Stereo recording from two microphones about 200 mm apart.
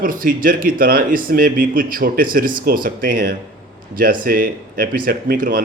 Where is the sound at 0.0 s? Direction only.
45° right (ahead or behind).